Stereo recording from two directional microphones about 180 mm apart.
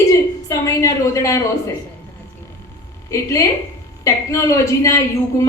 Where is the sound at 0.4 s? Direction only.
15° left (ahead or behind).